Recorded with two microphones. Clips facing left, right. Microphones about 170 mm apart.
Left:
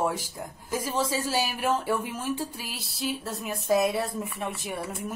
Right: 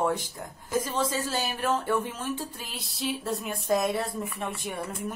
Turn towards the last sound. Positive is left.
turn(degrees=5)  # may be behind; listen again after turning